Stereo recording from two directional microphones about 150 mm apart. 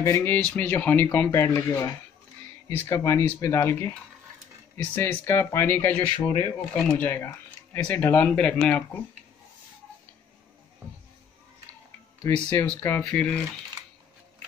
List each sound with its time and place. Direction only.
0.0 s speech: 15° left (ahead or behind)
4.9 s speech: 15° left (ahead or behind)
12.6 s speech: 10° left (ahead or behind)